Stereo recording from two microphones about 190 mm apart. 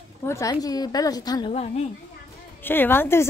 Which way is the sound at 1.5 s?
35° left (ahead or behind).